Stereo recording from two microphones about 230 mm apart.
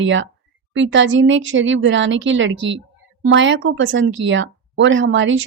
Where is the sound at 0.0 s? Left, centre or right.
Right.